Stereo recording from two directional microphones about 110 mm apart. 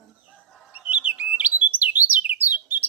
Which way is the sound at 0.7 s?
15° right (ahead or behind).